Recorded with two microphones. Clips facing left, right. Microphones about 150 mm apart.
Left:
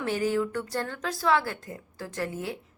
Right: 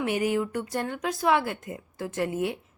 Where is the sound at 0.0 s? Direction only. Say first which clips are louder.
Right 1 dB; 15° right (ahead or behind).